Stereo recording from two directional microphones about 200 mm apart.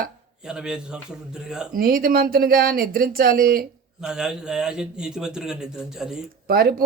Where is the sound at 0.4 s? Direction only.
5° right (ahead or behind).